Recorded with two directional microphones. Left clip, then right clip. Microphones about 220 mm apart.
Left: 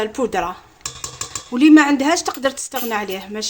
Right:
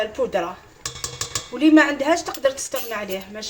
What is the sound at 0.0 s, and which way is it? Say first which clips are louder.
Speech: left 2 dB; 50° left (ahead or behind).